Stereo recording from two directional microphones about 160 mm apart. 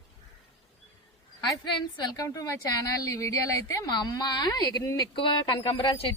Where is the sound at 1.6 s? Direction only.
30° left (ahead or behind).